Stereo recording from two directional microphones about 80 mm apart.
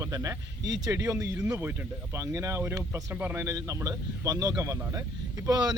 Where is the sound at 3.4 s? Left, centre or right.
Right.